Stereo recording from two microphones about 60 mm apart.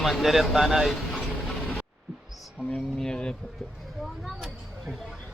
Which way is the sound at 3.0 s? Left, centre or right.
Centre.